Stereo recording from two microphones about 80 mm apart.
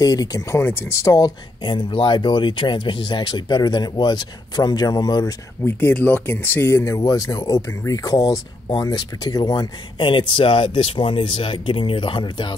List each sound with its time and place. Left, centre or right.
0.0 s speech: left
0.6 s speech: left
1.0 s speech: left
1.7 s speech: left
5.6 s speech: left
7.0 s speech: left